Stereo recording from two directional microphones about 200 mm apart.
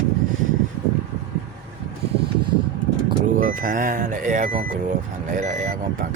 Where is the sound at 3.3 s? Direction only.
45° right (ahead or behind).